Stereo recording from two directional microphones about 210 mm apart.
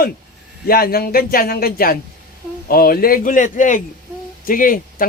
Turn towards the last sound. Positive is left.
turn(degrees=40)  # may be behind; listen again after turning